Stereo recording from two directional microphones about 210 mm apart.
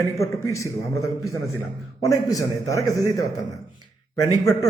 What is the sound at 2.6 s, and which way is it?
A man's voice, 15° left (ahead or behind).